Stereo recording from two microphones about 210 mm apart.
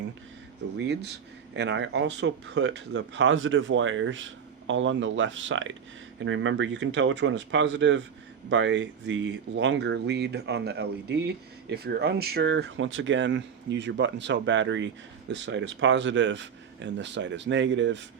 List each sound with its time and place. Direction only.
0.8 s speech: 55° right (ahead or behind)